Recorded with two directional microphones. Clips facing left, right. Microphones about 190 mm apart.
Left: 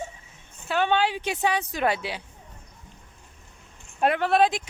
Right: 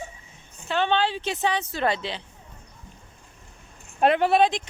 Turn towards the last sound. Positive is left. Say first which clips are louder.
# right 1 dB
turn(degrees=5)  # may be behind; listen again after turning